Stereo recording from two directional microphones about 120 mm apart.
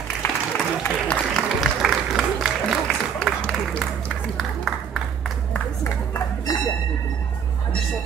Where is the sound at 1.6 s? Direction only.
Centre (ahead or behind).